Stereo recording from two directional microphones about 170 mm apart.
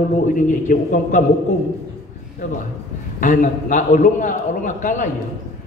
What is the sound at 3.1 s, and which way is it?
A man's voice, 50° left (ahead or behind).